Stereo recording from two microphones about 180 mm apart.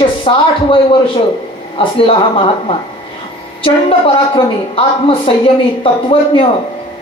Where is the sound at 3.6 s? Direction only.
30° left (ahead or behind).